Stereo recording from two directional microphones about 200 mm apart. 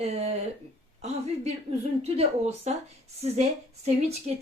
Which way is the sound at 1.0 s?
30° right (ahead or behind).